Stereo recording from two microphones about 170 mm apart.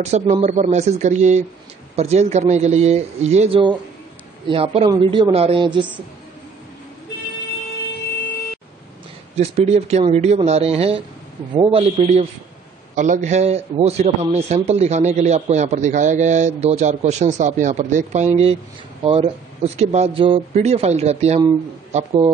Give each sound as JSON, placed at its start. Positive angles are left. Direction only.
{"t": 0.0, "sound": "a man's voice", "side_deg": -40}
{"t": 9.3, "sound": "a man's voice", "side_deg": -40}